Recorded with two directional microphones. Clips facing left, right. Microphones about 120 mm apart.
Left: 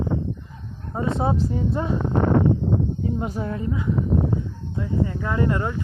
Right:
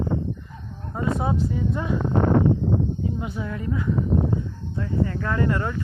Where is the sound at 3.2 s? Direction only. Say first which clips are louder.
Left 3 dB; 40° left (ahead or behind).